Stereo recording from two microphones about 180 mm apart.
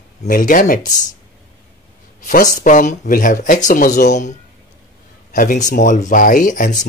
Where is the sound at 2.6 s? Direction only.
45° left (ahead or behind).